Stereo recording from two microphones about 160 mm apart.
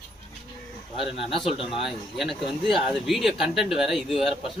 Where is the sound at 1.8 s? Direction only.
Centre (ahead or behind).